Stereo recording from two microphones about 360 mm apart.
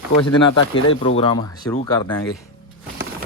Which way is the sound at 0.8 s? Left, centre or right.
Centre.